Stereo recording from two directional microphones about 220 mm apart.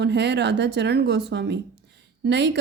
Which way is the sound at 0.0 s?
50° right (ahead or behind).